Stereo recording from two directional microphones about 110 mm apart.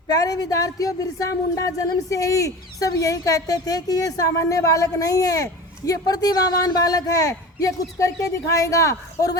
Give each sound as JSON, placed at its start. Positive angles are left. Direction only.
{"t": 0.1, "sound": "speech", "side_deg": 35}